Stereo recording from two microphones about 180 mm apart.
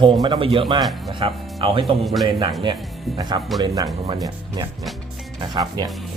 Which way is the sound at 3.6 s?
20° right (ahead or behind).